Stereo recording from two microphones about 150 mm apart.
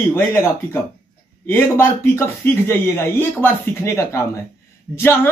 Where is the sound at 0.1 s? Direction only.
15° left (ahead or behind).